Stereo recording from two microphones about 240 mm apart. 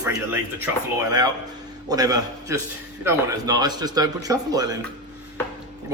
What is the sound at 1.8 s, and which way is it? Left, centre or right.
A man's voice, centre.